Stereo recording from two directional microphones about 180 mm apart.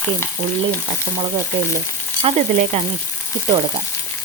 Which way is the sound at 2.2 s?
40° right (ahead or behind).